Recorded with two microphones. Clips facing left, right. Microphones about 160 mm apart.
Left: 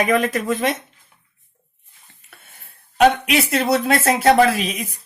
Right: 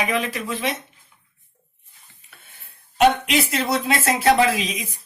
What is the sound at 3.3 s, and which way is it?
Speech, 60° left (ahead or behind).